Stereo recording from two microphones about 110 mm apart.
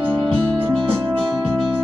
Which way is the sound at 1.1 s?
Centre (ahead or behind).